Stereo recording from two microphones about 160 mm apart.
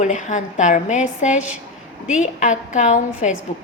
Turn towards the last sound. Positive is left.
turn(degrees=50)  # may be behind; listen again after turning